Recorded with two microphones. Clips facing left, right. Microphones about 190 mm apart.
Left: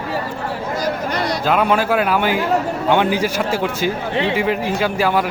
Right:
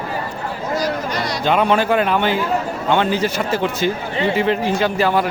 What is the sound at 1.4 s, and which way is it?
Speech, 5° left (ahead or behind).